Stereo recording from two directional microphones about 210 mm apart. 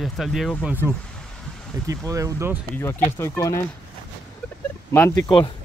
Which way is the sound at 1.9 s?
15° right (ahead or behind).